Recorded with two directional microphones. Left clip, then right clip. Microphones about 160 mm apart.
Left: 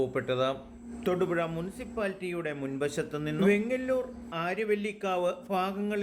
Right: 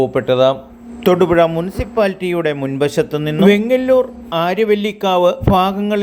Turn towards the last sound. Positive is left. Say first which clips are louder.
# right 17 dB
turn(degrees=-35)  # may be behind; listen again after turning